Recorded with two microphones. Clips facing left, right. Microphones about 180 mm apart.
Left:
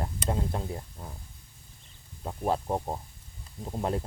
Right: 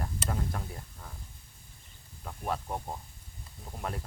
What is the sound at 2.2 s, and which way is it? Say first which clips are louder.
A man's voice: left 6 dB; 30° left (ahead or behind).